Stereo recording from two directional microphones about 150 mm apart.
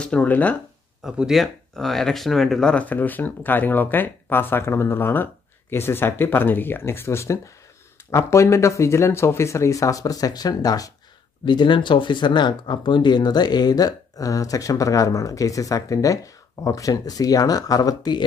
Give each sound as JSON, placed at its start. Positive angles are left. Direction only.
{"t": 0.0, "sound": "speech", "side_deg": 10}
{"t": 1.0, "sound": "speech", "side_deg": -5}